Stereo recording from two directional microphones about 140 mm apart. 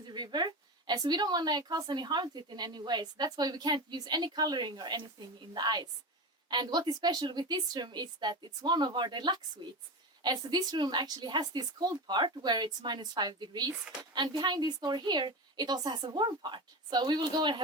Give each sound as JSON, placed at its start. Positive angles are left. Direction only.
{"t": 0.0, "sound": "a woman's voice", "side_deg": -30}